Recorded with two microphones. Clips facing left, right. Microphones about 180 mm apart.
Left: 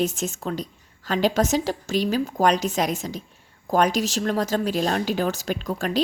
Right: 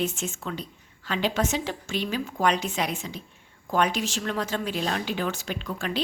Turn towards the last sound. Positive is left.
turn(degrees=40)  # may be behind; listen again after turning